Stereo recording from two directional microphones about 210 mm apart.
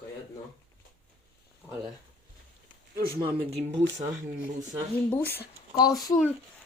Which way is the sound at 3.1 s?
25° right (ahead or behind).